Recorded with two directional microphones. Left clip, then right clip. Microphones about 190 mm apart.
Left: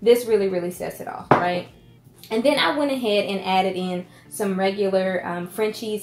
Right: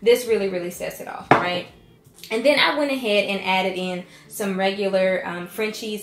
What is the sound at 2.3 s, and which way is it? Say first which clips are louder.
A woman's voice: right 2 dB; 40° left (ahead or behind).